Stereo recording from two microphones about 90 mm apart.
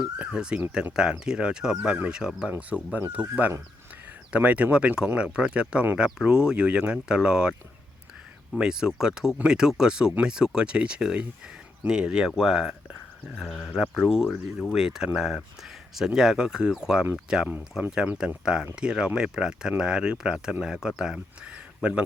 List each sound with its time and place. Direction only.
0.0 s speech: 10° right (ahead or behind)
8.5 s speech: 10° right (ahead or behind)